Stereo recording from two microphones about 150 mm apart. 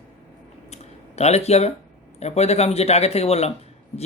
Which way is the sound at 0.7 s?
45° left (ahead or behind).